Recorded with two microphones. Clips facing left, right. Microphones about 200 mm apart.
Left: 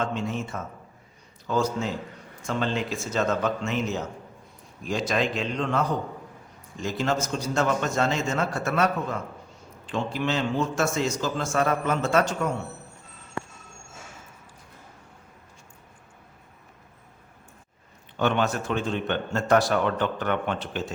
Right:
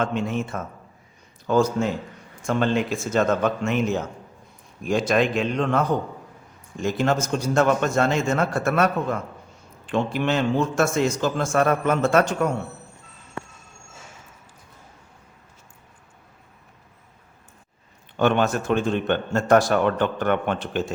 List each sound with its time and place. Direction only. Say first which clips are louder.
0.0 s a man's voice: right 4 dB; 60° right (ahead or behind)
6.8 s a man's voice: right 4 dB; 55° right (ahead or behind)
9.9 s a man's voice: right 4 dB; 60° right (ahead or behind)
18.2 s a man's voice: right 4 dB; 50° right (ahead or behind)